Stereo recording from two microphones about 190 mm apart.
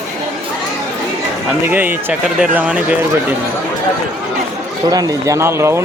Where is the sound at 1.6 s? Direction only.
10° right (ahead or behind).